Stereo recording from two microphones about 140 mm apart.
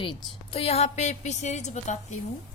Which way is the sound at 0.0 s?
40° left (ahead or behind).